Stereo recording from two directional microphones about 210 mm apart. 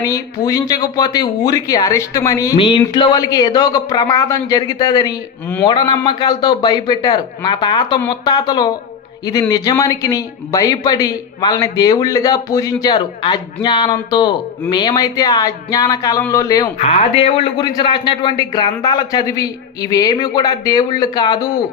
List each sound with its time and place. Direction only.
0.0 s a man's voice: 15° left (ahead or behind)
16.7 s a man's voice: 30° left (ahead or behind)